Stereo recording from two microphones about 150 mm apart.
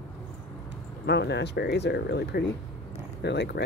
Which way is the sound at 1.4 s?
90° left.